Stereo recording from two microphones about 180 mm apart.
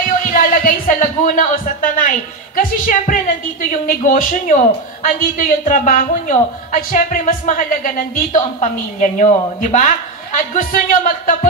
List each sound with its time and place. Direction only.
0.3 s a woman's voice: 45° left (ahead or behind)